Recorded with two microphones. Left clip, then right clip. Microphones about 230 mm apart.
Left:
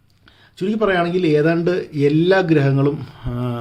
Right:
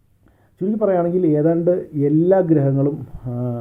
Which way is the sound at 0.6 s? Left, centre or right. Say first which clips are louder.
Even; centre.